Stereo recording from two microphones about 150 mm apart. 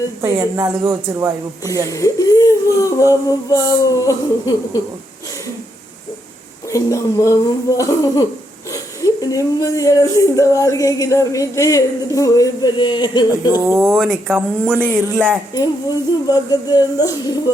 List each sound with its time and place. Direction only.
0.2 s speech: 25° right (ahead or behind)
1.9 s speech: 20° left (ahead or behind)
6.7 s speech: 25° left (ahead or behind)
13.5 s speech: 15° right (ahead or behind)
13.9 s speech: centre (ahead or behind)
14.7 s speech: 15° right (ahead or behind)
15.5 s speech: 25° left (ahead or behind)